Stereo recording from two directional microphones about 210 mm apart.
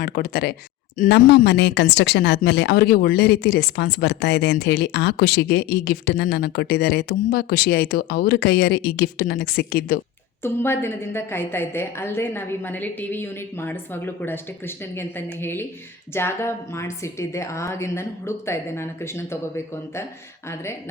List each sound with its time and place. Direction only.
0.0 s speech: 45° left (ahead or behind)
10.4 s a woman's voice: 10° left (ahead or behind)